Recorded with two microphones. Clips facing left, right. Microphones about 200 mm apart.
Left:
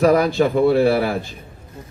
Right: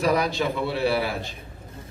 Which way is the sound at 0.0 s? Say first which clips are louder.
Left 8 dB; 50° left (ahead or behind).